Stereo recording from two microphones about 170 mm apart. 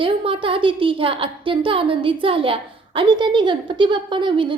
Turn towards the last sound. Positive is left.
turn(degrees=-30)  # may be behind; listen again after turning